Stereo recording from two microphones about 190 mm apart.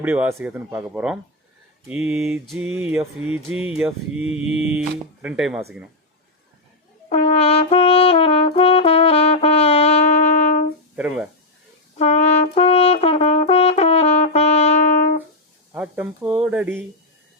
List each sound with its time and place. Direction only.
0.0 s speech: 10° right (ahead or behind)
1.9 s mantra: 5° right (ahead or behind)
7.1 s brass instrument: 30° left (ahead or behind)
10.9 s mantra: 5° right (ahead or behind)
11.9 s brass instrument: 35° left (ahead or behind)
15.7 s mantra: 5° right (ahead or behind)